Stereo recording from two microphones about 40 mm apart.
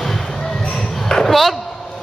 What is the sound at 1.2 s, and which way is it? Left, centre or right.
Speech, centre.